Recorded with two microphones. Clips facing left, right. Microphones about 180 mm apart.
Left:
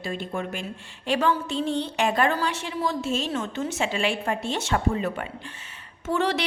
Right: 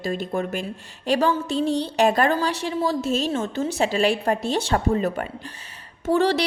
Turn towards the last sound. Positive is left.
turn(degrees=-35)  # may be behind; listen again after turning